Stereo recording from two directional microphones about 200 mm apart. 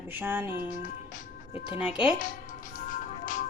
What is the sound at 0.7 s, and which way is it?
Speech, 40° left (ahead or behind).